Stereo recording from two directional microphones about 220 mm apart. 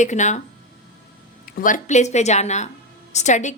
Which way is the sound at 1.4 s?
40° left (ahead or behind).